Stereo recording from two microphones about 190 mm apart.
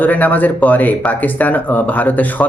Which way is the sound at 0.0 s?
10° left (ahead or behind).